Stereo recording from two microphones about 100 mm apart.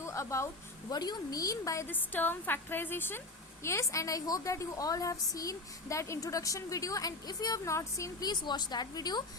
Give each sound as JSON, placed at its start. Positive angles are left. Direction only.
{"t": 0.0, "sound": "a sound", "side_deg": 30}
{"t": 0.9, "sound": "a woman's voice", "side_deg": 40}
{"t": 1.9, "sound": "a woman's voice", "side_deg": 20}
{"t": 8.3, "sound": "a woman's voice", "side_deg": 45}